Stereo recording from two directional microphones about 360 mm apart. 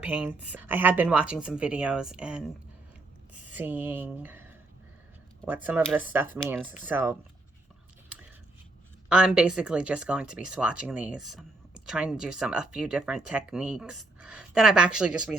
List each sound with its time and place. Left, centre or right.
0.0 s speech: centre
3.5 s speech: centre
5.6 s speech: centre
9.0 s speech: centre